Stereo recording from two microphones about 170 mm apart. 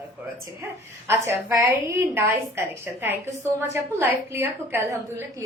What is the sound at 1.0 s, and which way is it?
A woman's voice, 15° right (ahead or behind).